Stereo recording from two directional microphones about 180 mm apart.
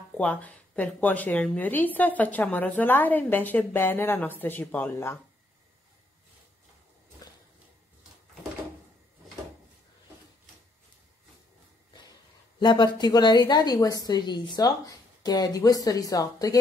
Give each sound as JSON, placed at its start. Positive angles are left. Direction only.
{"t": 0.2, "sound": "a woman's voice", "side_deg": 10}
{"t": 12.5, "sound": "a woman's voice", "side_deg": 25}